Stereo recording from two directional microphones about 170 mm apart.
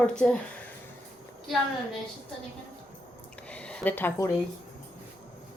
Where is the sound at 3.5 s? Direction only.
5° left (ahead or behind).